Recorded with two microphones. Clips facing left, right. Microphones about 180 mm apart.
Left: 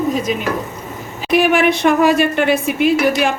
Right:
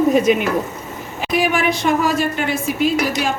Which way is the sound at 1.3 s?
65° left (ahead or behind).